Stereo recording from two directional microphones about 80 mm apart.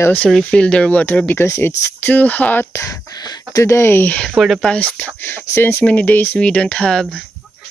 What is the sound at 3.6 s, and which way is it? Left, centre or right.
Speech, left.